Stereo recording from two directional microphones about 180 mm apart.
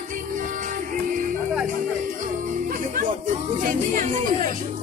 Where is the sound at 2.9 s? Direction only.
50° right (ahead or behind).